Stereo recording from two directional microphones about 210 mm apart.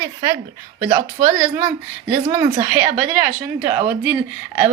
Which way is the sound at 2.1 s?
20° right (ahead or behind).